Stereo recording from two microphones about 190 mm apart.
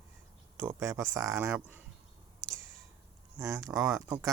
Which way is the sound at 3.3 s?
15° right (ahead or behind).